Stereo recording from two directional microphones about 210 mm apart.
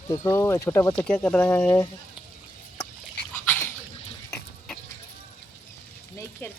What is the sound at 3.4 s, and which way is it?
Dog, 10° left (ahead or behind).